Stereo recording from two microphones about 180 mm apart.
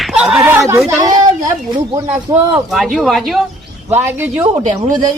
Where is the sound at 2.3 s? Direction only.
15° right (ahead or behind).